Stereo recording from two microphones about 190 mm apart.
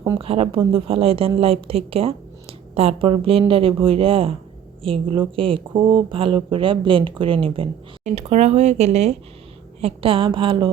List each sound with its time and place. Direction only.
0.0 s a woman's voice: 25° right (ahead or behind)